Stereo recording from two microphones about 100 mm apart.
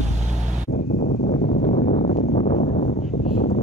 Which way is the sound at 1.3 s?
90° left.